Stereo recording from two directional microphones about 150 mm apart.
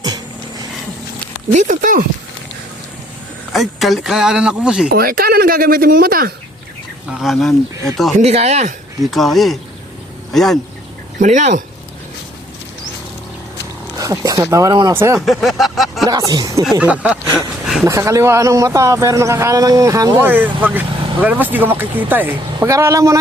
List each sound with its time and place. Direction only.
1.5 s speech: 60° right (ahead or behind)
3.5 s speech: centre (ahead or behind)
4.9 s speech: 85° right
7.1 s speech: centre (ahead or behind)
8.2 s speech: 45° right (ahead or behind)
9.0 s speech: centre (ahead or behind)
11.2 s speech: 55° right (ahead or behind)
14.0 s a man's voice: 25° right (ahead or behind)
15.2 s speech: centre (ahead or behind)
16.0 s a man's voice: 25° right (ahead or behind)
16.7 s speech: 10° right (ahead or behind)
17.8 s a man's voice: 20° right (ahead or behind)